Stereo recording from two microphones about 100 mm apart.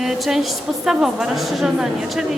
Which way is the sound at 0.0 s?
5° right (ahead or behind).